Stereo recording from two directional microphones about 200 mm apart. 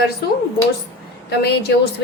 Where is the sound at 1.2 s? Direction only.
55° left (ahead or behind).